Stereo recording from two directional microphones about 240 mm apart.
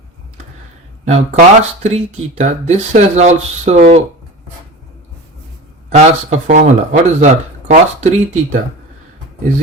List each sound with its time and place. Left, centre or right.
1.0 s speech: right
5.9 s speech: right